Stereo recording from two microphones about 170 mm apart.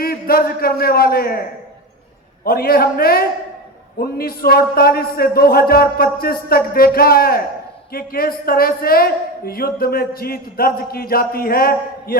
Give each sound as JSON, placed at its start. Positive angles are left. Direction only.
{"t": 0.0, "sound": "a man's voice", "side_deg": 60}
{"t": 2.4, "sound": "a man's voice", "side_deg": 60}